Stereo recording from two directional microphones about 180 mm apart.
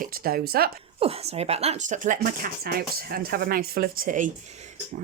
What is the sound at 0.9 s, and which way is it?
Speech, 30° right (ahead or behind).